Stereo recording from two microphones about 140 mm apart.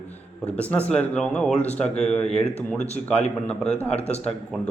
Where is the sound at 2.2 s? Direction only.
45° left (ahead or behind).